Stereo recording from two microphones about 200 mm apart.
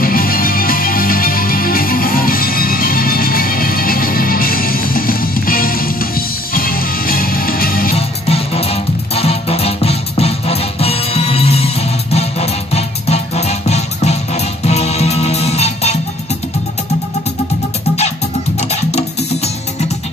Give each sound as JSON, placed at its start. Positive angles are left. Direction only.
{"t": 0.0, "sound": "music", "side_deg": 45}
{"t": 8.3, "sound": "music", "side_deg": 30}
{"t": 18.6, "sound": "music", "side_deg": 35}